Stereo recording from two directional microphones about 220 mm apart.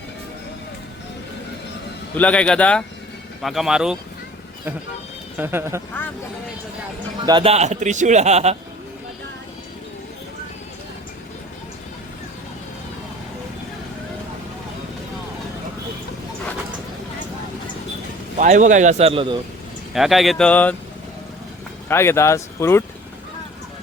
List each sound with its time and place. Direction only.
2.1 s speech: 5° left (ahead or behind)
5.4 s speech: 10° right (ahead or behind)
7.2 s a man's voice: 20° right (ahead or behind)
18.3 s a man's voice: 35° right (ahead or behind)
19.9 s speech: centre (ahead or behind)
21.8 s speech: 10° left (ahead or behind)